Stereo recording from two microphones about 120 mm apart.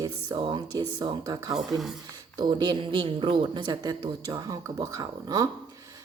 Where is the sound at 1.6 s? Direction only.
Centre (ahead or behind).